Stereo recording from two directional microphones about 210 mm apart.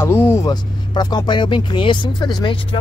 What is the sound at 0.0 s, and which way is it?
Speech, 10° left (ahead or behind).